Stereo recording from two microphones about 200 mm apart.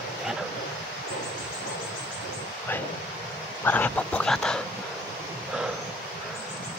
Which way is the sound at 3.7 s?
10° left (ahead or behind).